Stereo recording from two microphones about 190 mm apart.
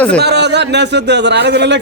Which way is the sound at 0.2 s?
60° right (ahead or behind).